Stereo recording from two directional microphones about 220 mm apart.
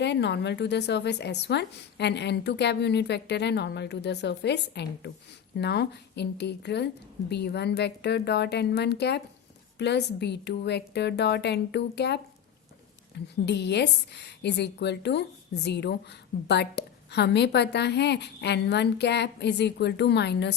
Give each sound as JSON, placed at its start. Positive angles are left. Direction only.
{"t": 0.0, "sound": "a woman's voice", "side_deg": 50}